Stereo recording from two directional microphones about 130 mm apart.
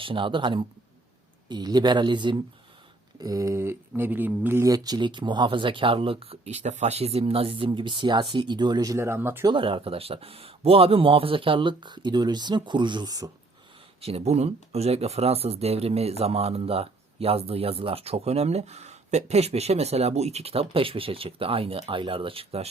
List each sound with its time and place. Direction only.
0.0 s speech: 40° right (ahead or behind); by 9.5 s 20° right (ahead or behind)
9.5 s speech: 40° right (ahead or behind)
14.0 s speech: 50° right (ahead or behind)